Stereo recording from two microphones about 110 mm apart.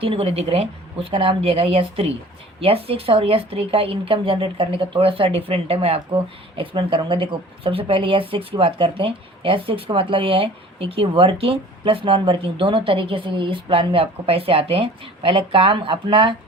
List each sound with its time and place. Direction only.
0.0 s speech: 60° right (ahead or behind)
6.6 s speech: 50° right (ahead or behind)